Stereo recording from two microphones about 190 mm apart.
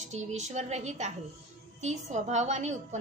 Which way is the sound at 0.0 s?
35° right (ahead or behind).